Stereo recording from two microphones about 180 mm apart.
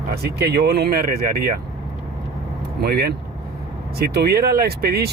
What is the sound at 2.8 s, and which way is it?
Speech, 60° right (ahead or behind).